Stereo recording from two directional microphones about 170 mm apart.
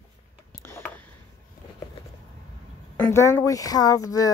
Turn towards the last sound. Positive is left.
turn(degrees=20)  # may be behind; listen again after turning